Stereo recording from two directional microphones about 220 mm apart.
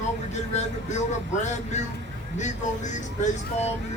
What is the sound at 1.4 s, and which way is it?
Speech, 30° left (ahead or behind).